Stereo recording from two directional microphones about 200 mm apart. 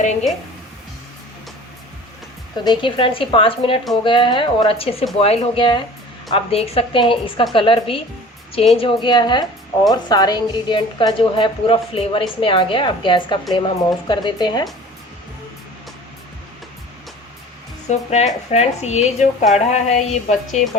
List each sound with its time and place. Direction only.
0.0 s a woman's voice: 35° left (ahead or behind)
2.6 s a woman's voice: 25° left (ahead or behind)
17.8 s a woman's voice: 35° left (ahead or behind)